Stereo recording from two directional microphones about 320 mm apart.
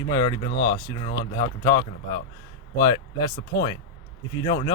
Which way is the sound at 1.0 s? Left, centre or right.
Centre.